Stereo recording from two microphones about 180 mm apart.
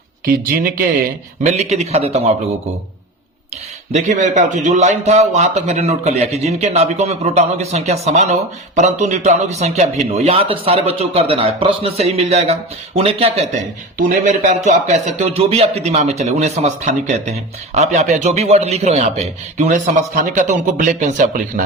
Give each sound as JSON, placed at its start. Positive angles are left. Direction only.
{"t": 0.3, "sound": "speech", "side_deg": -55}
{"t": 1.5, "sound": "a man's voice", "side_deg": -35}
{"t": 3.9, "sound": "a man's voice", "side_deg": -40}
{"t": 14.0, "sound": "a man's voice", "side_deg": -45}